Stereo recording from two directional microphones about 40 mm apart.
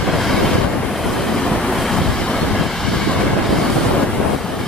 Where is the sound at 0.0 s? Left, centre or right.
Centre.